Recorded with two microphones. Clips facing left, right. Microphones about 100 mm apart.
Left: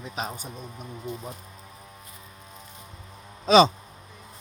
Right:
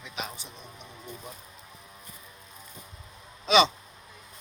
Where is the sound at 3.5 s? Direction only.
40° left (ahead or behind).